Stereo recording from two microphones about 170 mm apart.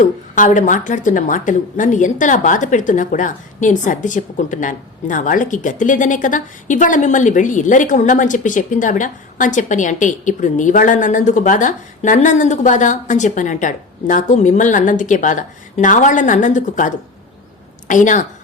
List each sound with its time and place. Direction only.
0.0 s a woman's voice: 50° left (ahead or behind)